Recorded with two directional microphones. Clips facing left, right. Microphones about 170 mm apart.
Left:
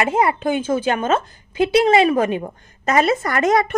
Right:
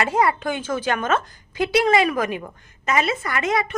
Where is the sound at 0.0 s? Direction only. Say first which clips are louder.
Left 2 dB; 25° left (ahead or behind).